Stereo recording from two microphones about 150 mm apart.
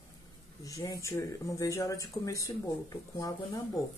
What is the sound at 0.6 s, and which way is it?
Speech, 20° left (ahead or behind).